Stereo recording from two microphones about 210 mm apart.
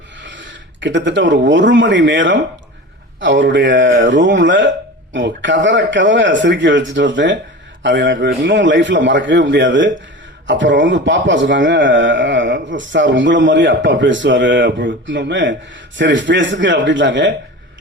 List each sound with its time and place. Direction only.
0.2 s a man's voice: 60° right (ahead or behind)